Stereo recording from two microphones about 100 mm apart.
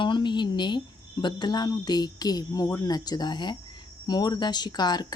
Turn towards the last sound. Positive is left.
turn(degrees=45)  # may be behind; listen again after turning